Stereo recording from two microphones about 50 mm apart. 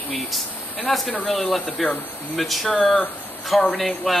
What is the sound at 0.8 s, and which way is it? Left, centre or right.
Speech, centre.